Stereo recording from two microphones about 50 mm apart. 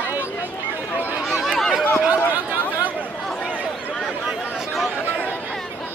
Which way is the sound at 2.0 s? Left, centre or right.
Right.